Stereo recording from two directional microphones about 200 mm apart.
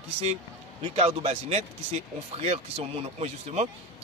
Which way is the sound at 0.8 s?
25° right (ahead or behind).